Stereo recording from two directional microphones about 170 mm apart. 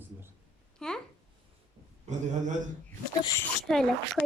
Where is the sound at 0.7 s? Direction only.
5° left (ahead or behind).